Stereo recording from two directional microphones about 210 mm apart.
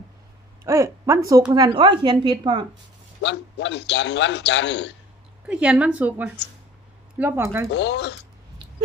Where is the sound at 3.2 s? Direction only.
60° left (ahead or behind).